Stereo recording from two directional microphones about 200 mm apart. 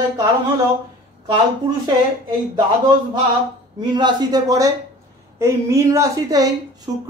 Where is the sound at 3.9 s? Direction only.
20° right (ahead or behind).